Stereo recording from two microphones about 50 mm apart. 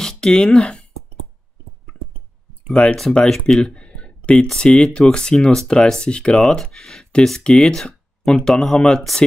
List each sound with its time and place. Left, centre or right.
0.0 s speech: centre
2.8 s speech: left
3.3 s speech: centre
3.7 s a sound: centre
4.6 s speech: centre